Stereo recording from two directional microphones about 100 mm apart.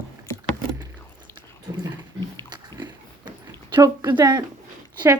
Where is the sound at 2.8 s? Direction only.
50° right (ahead or behind).